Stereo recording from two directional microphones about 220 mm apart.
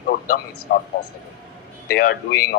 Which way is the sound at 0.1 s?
40° left (ahead or behind).